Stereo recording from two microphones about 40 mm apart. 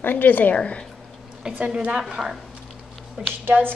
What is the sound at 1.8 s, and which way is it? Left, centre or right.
Speech, right.